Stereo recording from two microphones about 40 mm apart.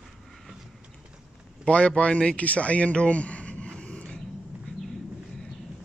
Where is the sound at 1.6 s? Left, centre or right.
Left.